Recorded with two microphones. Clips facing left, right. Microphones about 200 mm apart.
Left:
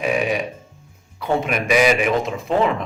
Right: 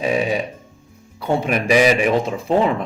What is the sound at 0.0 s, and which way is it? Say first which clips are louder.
Burping: right 1 dB; 30° right (ahead or behind).